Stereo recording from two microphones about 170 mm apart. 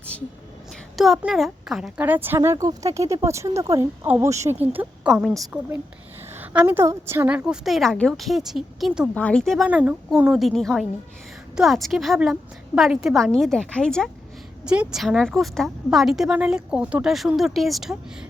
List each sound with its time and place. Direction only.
0.9 s speech: centre (ahead or behind)